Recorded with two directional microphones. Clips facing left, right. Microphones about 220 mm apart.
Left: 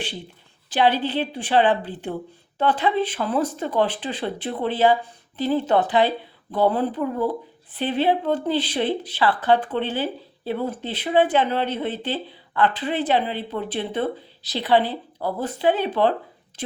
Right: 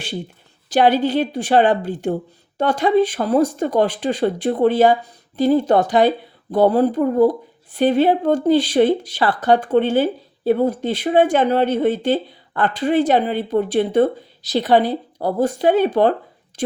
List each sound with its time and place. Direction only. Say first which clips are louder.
0.7 s speech: right 5 dB; 45° right (ahead or behind)